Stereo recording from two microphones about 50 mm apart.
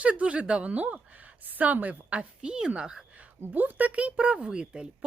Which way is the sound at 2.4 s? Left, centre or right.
Centre.